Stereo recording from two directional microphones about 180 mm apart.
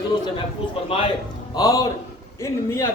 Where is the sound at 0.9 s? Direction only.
30° left (ahead or behind).